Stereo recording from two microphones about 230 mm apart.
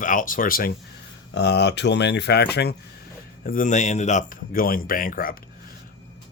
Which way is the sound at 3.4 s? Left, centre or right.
Left.